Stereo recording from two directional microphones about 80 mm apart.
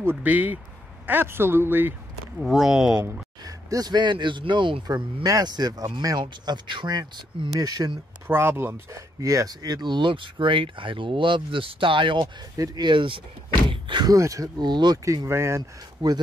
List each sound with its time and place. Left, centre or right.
0.0 s a man's voice: right
2.4 s speech: centre
3.4 s speech: right
6.1 s speech: right
7.6 s speech: right
8.3 s a man's voice: right
8.9 s speech: right
12.5 s speech: right
12.8 s speech: right
14.0 s speech: right
14.6 s speech: right
15.2 s speech: right
16.0 s speech: right